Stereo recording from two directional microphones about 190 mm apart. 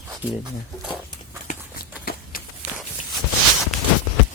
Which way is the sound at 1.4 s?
50° left (ahead or behind).